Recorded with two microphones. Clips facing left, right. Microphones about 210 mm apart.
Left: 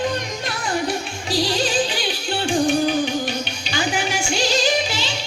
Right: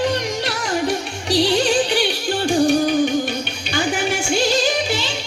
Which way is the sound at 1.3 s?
65° right (ahead or behind).